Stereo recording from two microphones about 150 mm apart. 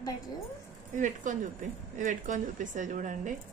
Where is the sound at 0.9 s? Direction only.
55° right (ahead or behind).